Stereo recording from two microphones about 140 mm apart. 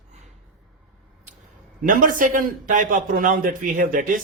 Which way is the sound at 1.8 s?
75° right (ahead or behind).